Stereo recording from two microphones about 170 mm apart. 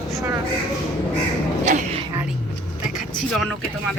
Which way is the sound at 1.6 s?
45° right (ahead or behind).